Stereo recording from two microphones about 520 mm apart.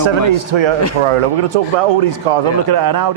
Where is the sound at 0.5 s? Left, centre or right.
Right.